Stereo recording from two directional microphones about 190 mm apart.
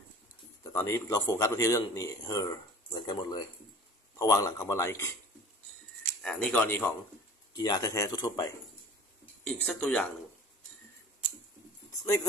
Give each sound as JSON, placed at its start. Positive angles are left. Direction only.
{"t": 0.7, "sound": "speech", "side_deg": 15}
{"t": 6.2, "sound": "speech", "side_deg": 10}
{"t": 9.4, "sound": "speech", "side_deg": 5}